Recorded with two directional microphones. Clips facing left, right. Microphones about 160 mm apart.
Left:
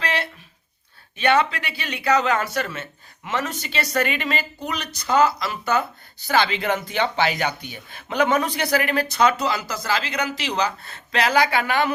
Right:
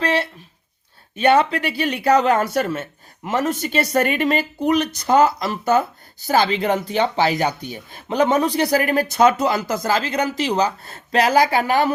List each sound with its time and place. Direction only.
1.1 s speech: 45° right (ahead or behind)